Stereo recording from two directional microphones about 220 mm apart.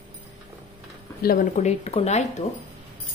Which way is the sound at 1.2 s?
40° left (ahead or behind).